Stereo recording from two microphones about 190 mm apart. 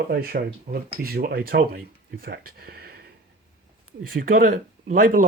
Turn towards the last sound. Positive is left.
turn(degrees=-45)  # may be behind; listen again after turning